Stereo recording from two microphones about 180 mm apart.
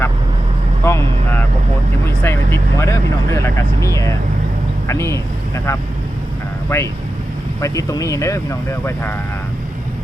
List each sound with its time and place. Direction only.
0.9 s vehicle: 15° left (ahead or behind)
3.8 s speech: 15° left (ahead or behind)